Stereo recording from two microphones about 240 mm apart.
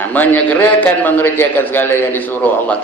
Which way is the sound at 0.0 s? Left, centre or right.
Centre.